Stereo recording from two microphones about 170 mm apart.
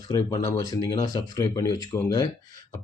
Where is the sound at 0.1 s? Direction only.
20° left (ahead or behind).